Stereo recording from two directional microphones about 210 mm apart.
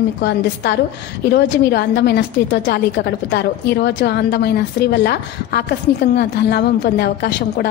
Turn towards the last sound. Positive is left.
turn(degrees=50)  # may be behind; listen again after turning